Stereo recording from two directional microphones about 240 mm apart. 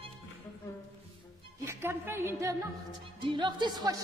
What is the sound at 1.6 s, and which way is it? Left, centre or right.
Music, centre.